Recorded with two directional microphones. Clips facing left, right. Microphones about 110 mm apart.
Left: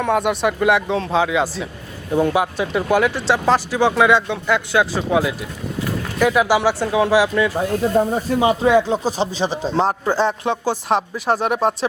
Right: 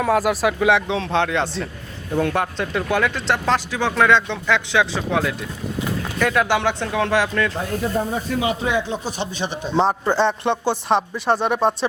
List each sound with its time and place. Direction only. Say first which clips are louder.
0.0 s a man's voice: even; centre (ahead or behind)
8.3 s speech: left 8 dB; 35° left (ahead or behind)
9.7 s a man's voice: right 2 dB; centre (ahead or behind)